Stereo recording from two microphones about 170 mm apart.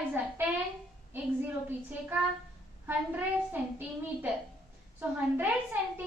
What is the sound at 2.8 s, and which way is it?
A woman's voice, 10° right (ahead or behind).